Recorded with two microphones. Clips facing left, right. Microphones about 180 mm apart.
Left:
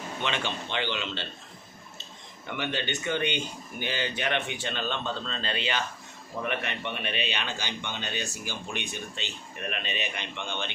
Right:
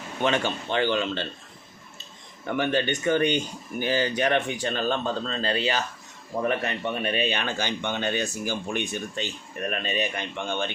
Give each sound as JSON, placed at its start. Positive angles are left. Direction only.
{"t": 0.2, "sound": "speech", "side_deg": -45}
{"t": 2.5, "sound": "speech", "side_deg": -45}